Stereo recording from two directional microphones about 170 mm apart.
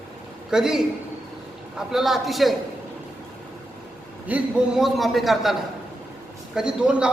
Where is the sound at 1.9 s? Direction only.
Centre (ahead or behind).